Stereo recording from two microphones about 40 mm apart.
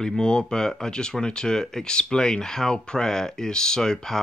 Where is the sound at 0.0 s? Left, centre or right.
Centre.